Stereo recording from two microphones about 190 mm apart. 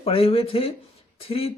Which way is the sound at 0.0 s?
30° left (ahead or behind).